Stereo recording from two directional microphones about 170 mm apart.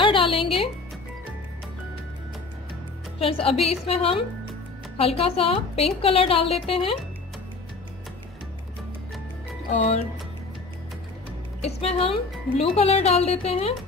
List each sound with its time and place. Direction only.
0.0 s music: 30° left (ahead or behind)
3.2 s speech: 35° left (ahead or behind)
9.7 s speech: 35° left (ahead or behind)
11.6 s speech: 35° left (ahead or behind)